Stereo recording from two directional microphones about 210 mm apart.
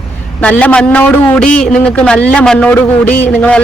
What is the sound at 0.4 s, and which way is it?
A man's voice, 5° left (ahead or behind).